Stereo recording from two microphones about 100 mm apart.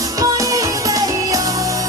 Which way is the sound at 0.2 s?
35° right (ahead or behind).